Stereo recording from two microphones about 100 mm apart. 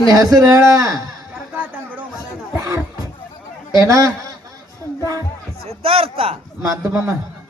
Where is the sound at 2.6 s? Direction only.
35° right (ahead or behind).